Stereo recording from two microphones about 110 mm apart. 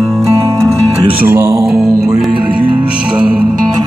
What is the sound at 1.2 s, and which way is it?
Music, 20° right (ahead or behind).